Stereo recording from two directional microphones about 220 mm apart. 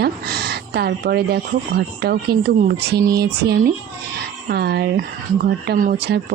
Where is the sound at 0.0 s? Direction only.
45° right (ahead or behind).